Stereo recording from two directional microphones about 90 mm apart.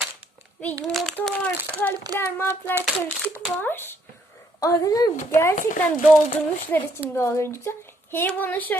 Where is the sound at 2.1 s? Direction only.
25° left (ahead or behind).